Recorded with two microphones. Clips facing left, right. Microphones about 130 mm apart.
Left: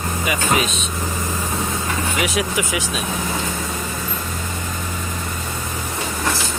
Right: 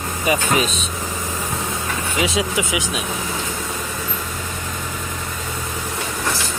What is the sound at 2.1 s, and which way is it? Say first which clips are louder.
Speech: right 3 dB; 25° right (ahead or behind).